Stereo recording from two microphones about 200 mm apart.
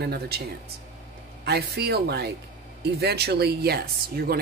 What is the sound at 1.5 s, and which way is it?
Speech, 55° right (ahead or behind).